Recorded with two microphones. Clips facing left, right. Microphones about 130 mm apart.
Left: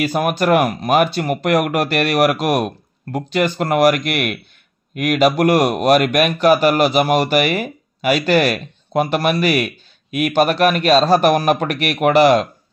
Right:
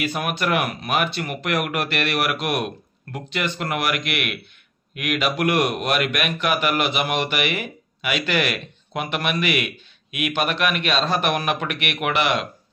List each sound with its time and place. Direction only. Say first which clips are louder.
0.0 s speech: left 7 dB; 40° left (ahead or behind)